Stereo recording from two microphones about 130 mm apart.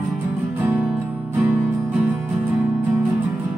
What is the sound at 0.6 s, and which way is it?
Music, 15° right (ahead or behind).